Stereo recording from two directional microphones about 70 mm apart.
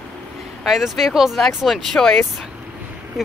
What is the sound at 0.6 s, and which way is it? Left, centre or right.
Speech, centre.